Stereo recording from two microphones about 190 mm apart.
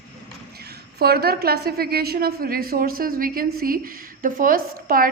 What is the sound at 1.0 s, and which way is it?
A woman's voice, 55° right (ahead or behind).